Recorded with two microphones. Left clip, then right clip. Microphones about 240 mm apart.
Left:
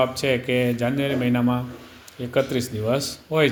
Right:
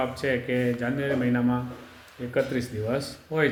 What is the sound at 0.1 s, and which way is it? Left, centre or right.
Speech, left.